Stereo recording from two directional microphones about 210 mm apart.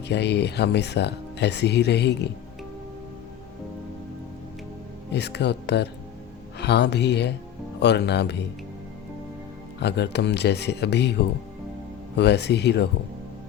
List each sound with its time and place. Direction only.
0.1 s speech: 55° left (ahead or behind)
5.1 s speech: 55° left (ahead or behind)
9.8 s speech: 55° left (ahead or behind)